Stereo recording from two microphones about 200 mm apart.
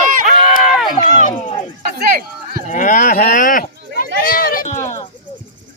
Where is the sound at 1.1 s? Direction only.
40° left (ahead or behind).